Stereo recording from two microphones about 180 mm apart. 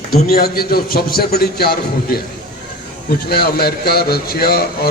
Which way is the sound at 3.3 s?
60° left (ahead or behind).